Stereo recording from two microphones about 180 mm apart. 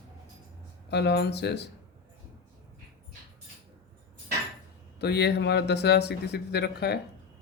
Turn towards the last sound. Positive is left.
turn(degrees=65)  # may be behind; listen again after turning